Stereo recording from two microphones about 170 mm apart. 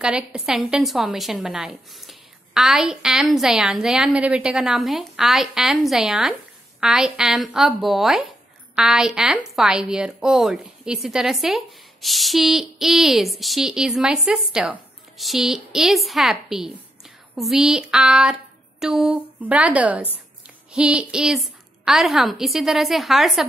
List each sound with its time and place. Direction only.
0.0 s a woman's voice: 5° right (ahead or behind)